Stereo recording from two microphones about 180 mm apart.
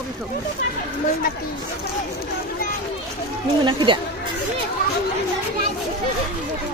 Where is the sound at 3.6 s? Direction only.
25° right (ahead or behind).